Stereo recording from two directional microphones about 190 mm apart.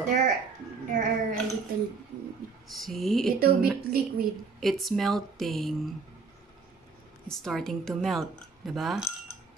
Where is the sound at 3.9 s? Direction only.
60° right (ahead or behind).